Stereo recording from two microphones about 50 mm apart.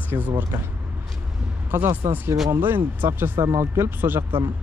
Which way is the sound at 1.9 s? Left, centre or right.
Right.